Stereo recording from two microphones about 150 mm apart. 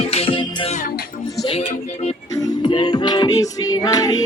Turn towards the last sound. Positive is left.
turn(degrees=25)  # may be behind; listen again after turning